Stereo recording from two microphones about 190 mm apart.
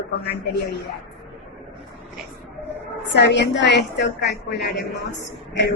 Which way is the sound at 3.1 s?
65° left (ahead or behind).